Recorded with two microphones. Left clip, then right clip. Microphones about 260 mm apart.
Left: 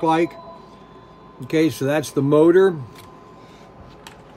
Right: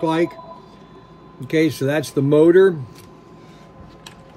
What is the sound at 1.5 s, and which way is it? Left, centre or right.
Speech, centre.